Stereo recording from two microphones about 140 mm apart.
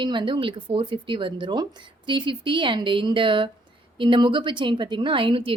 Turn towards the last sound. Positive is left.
turn(degrees=-40)  # may be behind; listen again after turning